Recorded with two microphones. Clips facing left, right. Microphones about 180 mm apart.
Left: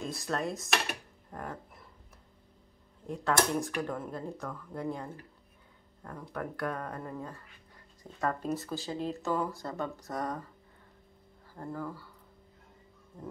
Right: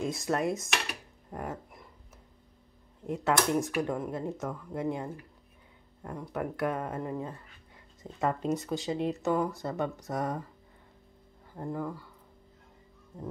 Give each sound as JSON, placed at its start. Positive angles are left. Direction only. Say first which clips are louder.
{"t": 0.0, "sound": "dishes", "louder": "right 4 dB", "side_deg": -20}
{"t": 0.4, "sound": "dishes", "louder": "right 2 dB", "side_deg": 0}
{"t": 1.3, "sound": "a sound", "louder": "right 3 dB", "side_deg": -20}
{"t": 3.1, "sound": "speech", "louder": "right 2 dB", "side_deg": -20}
{"t": 11.5, "sound": "speech", "louder": "right 3 dB", "side_deg": -20}